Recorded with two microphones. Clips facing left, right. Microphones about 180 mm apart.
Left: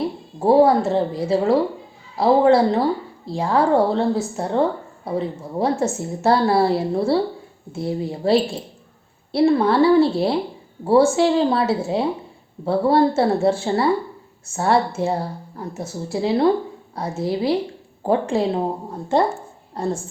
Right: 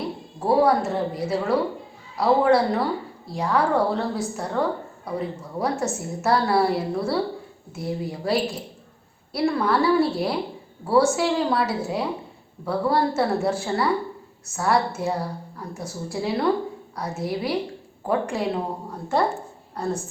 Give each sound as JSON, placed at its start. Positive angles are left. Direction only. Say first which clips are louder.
{"t": 0.3, "sound": "a woman's voice", "louder": "left 5 dB", "side_deg": 25}
{"t": 19.7, "sound": "a woman's voice", "louder": "left 3 dB", "side_deg": 25}